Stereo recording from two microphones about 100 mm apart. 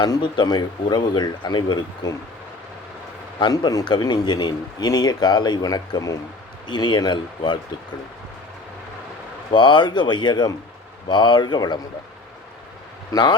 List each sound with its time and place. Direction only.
0.0 s speech: 50° left (ahead or behind)
3.4 s speech: 45° left (ahead or behind)
9.5 s speech: 50° left (ahead or behind)
13.1 s speech: 45° left (ahead or behind)